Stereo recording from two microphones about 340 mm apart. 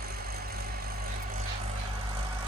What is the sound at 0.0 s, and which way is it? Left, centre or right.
Vehicle, right.